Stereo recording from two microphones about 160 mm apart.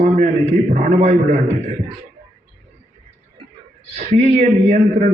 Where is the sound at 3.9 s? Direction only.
45° right (ahead or behind).